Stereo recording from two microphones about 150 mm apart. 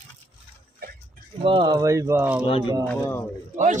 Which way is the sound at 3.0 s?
20° left (ahead or behind).